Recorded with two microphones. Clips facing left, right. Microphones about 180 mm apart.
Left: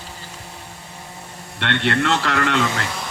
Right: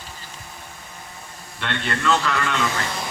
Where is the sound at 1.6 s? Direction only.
75° left (ahead or behind).